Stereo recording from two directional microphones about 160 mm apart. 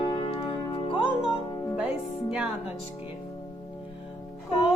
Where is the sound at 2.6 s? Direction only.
35° left (ahead or behind).